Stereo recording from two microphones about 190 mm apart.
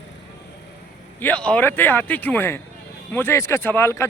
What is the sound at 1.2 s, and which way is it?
A man's voice, 5° left (ahead or behind).